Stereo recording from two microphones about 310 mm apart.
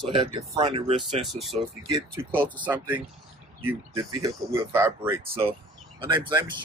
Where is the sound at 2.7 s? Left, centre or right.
Centre.